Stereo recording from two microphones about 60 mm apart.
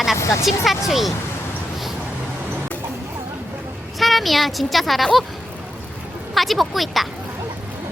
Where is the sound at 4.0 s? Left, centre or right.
Centre.